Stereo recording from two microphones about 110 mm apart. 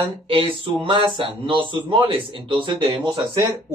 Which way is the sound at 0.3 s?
55° right (ahead or behind).